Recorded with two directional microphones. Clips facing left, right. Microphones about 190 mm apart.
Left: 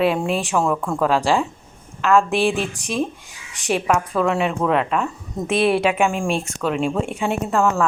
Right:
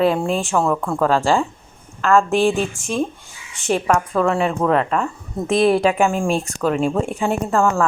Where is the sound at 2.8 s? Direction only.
40° left (ahead or behind).